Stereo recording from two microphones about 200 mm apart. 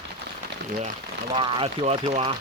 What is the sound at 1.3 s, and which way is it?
Speech, 25° right (ahead or behind).